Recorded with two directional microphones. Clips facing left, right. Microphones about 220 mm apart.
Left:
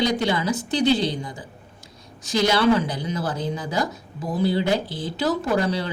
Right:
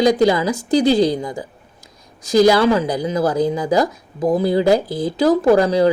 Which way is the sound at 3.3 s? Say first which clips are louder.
Right 9 dB; 35° right (ahead or behind).